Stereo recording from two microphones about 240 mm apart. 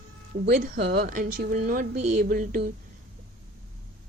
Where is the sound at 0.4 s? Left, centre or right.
Right.